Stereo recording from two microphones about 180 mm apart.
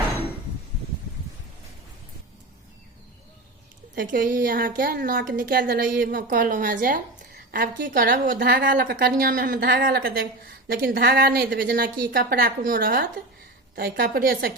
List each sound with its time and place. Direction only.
3.9 s a woman's voice: 50° right (ahead or behind)